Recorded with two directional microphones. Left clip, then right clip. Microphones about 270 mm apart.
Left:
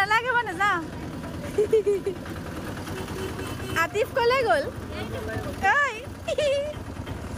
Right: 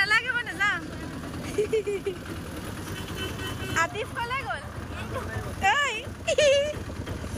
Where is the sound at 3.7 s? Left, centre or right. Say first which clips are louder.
Left 3 dB; centre.